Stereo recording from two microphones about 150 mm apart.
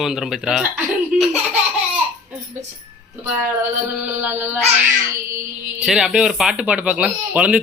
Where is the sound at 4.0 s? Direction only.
10° right (ahead or behind).